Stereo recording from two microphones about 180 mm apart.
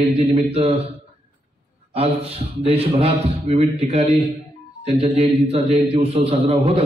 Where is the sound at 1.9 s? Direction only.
35° right (ahead or behind).